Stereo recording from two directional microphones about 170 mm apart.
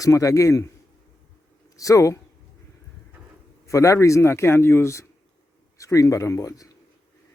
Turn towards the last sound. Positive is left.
turn(degrees=20)  # may be behind; listen again after turning